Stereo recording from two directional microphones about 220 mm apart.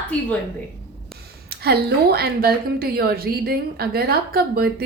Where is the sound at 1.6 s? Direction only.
45° right (ahead or behind).